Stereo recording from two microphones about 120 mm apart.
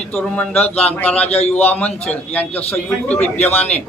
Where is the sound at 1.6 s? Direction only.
15° left (ahead or behind).